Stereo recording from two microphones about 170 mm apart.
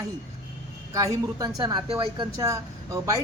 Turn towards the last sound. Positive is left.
turn(degrees=-20)  # may be behind; listen again after turning